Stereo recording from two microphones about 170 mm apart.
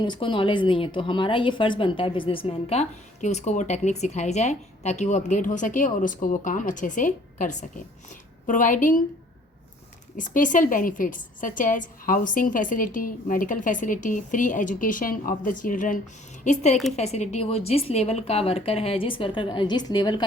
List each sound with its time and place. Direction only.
0.0 s a woman's voice: 30° left (ahead or behind); by 9.0 s 50° left (ahead or behind)
10.2 s a woman's voice: 50° left (ahead or behind); by 20.2 s 25° left (ahead or behind)